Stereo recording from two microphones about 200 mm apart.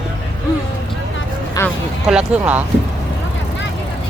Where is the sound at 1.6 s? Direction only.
15° left (ahead or behind).